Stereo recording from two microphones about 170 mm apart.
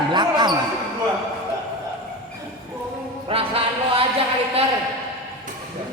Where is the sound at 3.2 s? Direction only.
35° right (ahead or behind).